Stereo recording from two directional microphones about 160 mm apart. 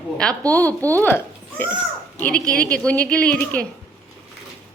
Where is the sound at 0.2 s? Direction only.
5° left (ahead or behind).